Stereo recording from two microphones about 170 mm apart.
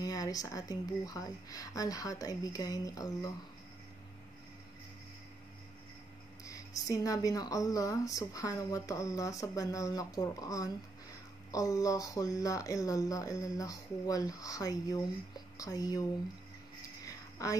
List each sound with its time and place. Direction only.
0.0 s speech: 20° left (ahead or behind)
6.4 s speech: 20° left (ahead or behind)
17.0 s a sound: 20° left (ahead or behind)